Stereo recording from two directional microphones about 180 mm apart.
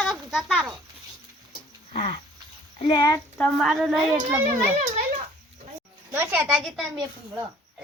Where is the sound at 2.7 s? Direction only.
30° left (ahead or behind).